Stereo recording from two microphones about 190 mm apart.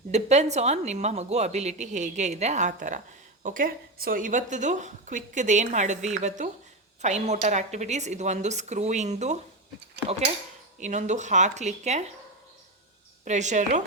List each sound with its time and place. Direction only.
0.1 s a woman's voice: 35° right (ahead or behind)
13.2 s a woman's voice: 40° right (ahead or behind)